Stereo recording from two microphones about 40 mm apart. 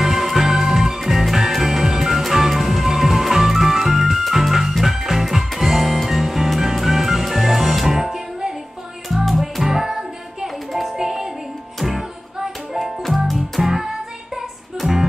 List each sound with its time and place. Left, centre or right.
0.0 s music: centre
9.1 s music: centre